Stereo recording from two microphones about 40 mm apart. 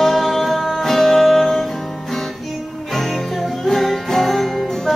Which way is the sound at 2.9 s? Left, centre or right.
Centre.